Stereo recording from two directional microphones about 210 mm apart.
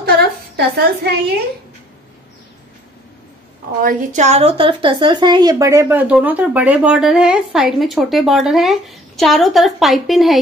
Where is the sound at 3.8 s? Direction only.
35° right (ahead or behind).